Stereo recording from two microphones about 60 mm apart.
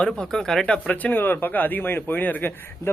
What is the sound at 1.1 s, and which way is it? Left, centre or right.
A man's voice, left.